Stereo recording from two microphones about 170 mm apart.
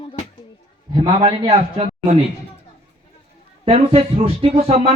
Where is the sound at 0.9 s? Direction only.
30° right (ahead or behind).